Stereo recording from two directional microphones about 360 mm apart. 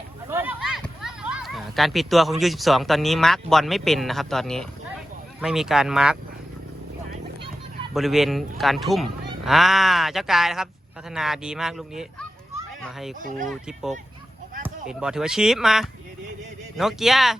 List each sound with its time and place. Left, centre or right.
0.3 s speech: centre
7.1 s a sound: centre
7.9 s a child's voice: centre
13.2 s speech: right
13.5 s speech: centre